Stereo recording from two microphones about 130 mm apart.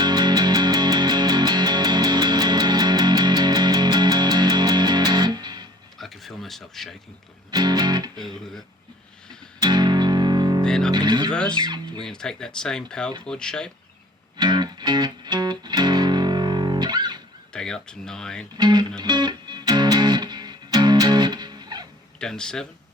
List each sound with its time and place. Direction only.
0.0 s music: 35° right (ahead or behind)
6.0 s a sound: centre (ahead or behind)
7.5 s music: 30° right (ahead or behind)
9.6 s music: 35° right (ahead or behind)
10.7 s speech: 5° left (ahead or behind)
10.9 s speech: 35° right (ahead or behind)
11.3 s speech: 5° left (ahead or behind)
11.6 s speech: 35° right (ahead or behind)
12.0 s speech: 5° left (ahead or behind)
14.3 s music: 35° right (ahead or behind)
17.5 s speech: 5° left (ahead or behind)
18.5 s speech: 35° right (ahead or behind)
19.0 s music: 35° right (ahead or behind)
22.2 s speech: 5° left (ahead or behind)